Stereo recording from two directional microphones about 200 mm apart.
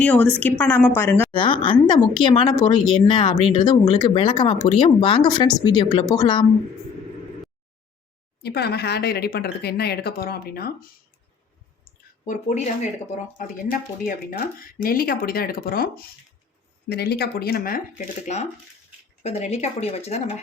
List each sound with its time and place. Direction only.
0.0 s a woman's voice: 5° left (ahead or behind)
1.3 s speech: 25° left (ahead or behind)
8.4 s speech: 55° left (ahead or behind)
12.3 s speech: 35° left (ahead or behind)
14.1 s speech: 45° left (ahead or behind)